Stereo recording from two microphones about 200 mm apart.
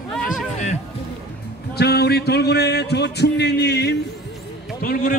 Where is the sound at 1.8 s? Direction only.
55° left (ahead or behind).